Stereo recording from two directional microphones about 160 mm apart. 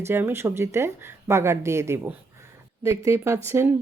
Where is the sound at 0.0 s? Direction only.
15° right (ahead or behind).